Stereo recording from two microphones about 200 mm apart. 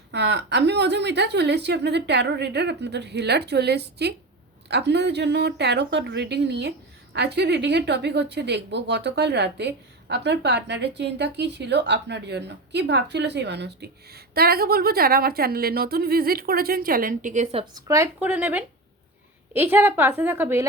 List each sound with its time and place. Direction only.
0.1 s speech: 60° right (ahead or behind); by 17.8 s 30° right (ahead or behind)
17.8 s a woman's voice: 15° right (ahead or behind)